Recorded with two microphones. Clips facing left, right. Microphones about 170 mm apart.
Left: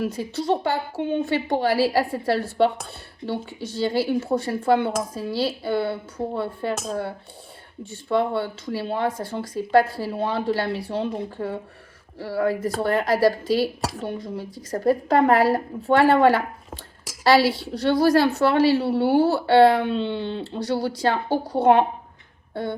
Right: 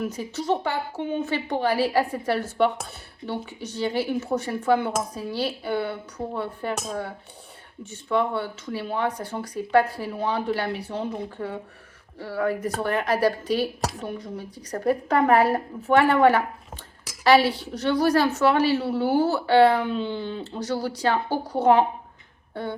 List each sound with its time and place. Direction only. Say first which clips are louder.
0.0 s speech: left 3 dB; 30° left (ahead or behind)
3.8 s speech: left 3 dB; 30° left (ahead or behind)